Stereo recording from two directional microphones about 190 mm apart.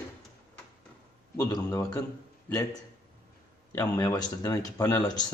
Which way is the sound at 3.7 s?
15° left (ahead or behind).